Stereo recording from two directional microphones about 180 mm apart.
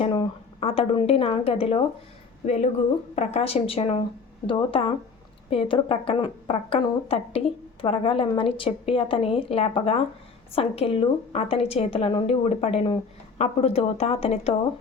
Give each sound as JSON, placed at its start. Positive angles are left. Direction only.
{"t": 0.0, "sound": "a woman's voice", "side_deg": 30}
{"t": 3.2, "sound": "a woman's voice", "side_deg": 35}